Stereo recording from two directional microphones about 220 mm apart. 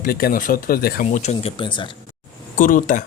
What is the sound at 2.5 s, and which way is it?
Speech, 40° left (ahead or behind).